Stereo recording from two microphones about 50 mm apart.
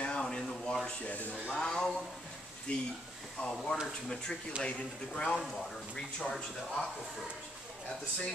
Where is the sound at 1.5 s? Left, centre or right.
Centre.